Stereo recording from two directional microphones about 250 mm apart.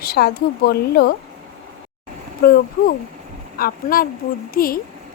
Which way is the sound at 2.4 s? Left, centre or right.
Left.